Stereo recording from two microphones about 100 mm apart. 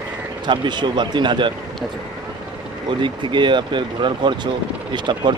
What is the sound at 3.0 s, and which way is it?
Speech, 50° right (ahead or behind).